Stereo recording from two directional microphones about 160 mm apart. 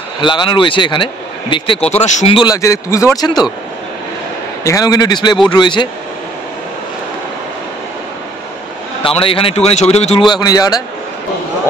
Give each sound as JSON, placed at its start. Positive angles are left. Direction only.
{"t": 0.2, "sound": "speech", "side_deg": 30}
{"t": 2.3, "sound": "speech", "side_deg": 20}
{"t": 4.6, "sound": "speech", "side_deg": 20}
{"t": 9.0, "sound": "speech", "side_deg": 35}
{"t": 10.2, "sound": "speech", "side_deg": 25}